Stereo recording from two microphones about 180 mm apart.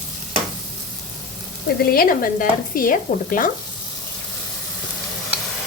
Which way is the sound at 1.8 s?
55° left (ahead or behind).